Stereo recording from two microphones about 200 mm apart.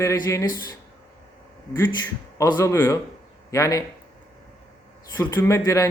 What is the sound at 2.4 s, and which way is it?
A man's voice, 15° left (ahead or behind).